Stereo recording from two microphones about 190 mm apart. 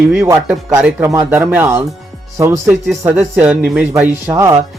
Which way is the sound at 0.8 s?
5° right (ahead or behind).